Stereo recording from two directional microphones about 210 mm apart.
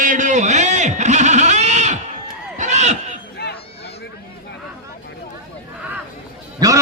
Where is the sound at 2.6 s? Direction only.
35° right (ahead or behind).